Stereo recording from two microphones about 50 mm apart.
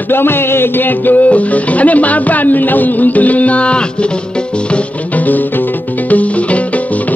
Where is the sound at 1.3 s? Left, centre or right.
Left.